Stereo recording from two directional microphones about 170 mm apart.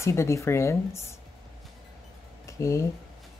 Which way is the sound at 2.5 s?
15° left (ahead or behind).